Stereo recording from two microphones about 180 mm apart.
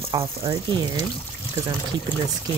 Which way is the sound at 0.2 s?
25° right (ahead or behind).